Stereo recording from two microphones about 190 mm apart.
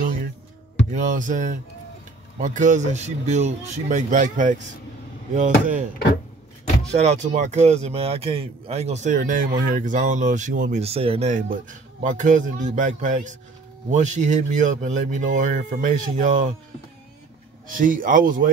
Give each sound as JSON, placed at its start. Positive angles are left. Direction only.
{"t": 0.9, "sound": "speech", "side_deg": -40}
{"t": 6.9, "sound": "speech", "side_deg": -35}
{"t": 17.6, "sound": "speech", "side_deg": -45}